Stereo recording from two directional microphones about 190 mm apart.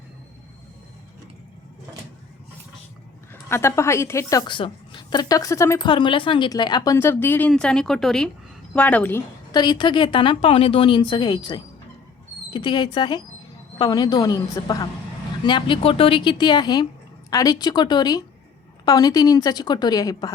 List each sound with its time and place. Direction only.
3.5 s a woman's voice: 15° left (ahead or behind)
5.9 s a woman's voice: 25° left (ahead or behind); by 9.2 s 10° left (ahead or behind)
9.5 s a woman's voice: 20° left (ahead or behind)